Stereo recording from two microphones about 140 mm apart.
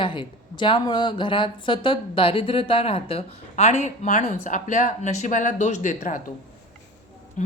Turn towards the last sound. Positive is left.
turn(degrees=60)  # may be behind; listen again after turning